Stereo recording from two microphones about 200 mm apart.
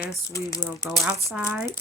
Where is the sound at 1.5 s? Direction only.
5° right (ahead or behind).